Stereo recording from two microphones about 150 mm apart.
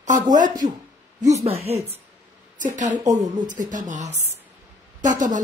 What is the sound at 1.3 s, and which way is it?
Speech, 45° right (ahead or behind).